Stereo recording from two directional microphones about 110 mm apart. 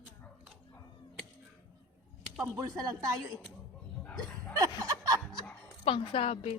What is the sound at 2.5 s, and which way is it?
Speech, 30° right (ahead or behind).